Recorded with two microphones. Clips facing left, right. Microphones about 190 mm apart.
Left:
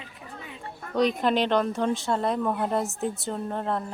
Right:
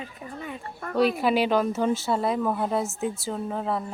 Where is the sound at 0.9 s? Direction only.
5° right (ahead or behind).